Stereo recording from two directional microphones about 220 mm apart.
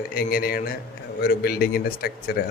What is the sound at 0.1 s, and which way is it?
A man's voice, 40° left (ahead or behind).